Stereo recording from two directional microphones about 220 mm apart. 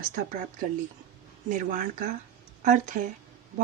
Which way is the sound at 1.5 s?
35° right (ahead or behind).